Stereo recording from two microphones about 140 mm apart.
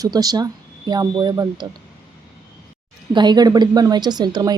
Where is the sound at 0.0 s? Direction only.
25° right (ahead or behind).